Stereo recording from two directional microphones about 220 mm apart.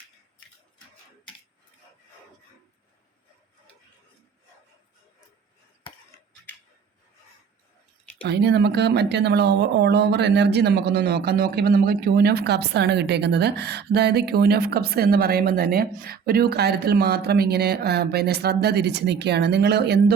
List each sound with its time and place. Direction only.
8.2 s speech: 50° right (ahead or behind)